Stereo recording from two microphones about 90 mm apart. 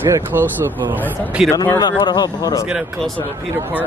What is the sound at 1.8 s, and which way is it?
Speech, 50° left (ahead or behind).